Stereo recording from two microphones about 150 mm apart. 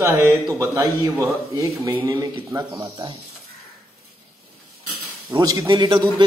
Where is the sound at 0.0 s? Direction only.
20° right (ahead or behind).